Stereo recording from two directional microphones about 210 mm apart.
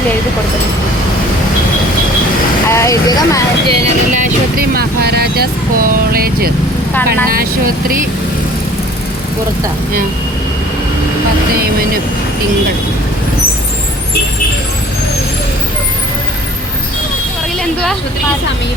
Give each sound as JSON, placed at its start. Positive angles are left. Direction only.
{"t": 2.6, "sound": "speech", "side_deg": 15}
{"t": 3.7, "sound": "speech", "side_deg": -35}